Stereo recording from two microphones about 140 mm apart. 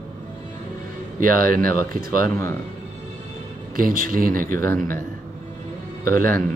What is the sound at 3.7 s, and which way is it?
Speech, 90° right.